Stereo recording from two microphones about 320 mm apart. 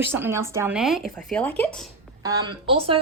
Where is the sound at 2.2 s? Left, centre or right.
Centre.